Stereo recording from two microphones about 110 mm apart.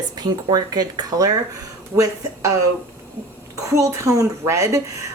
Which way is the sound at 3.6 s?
30° right (ahead or behind).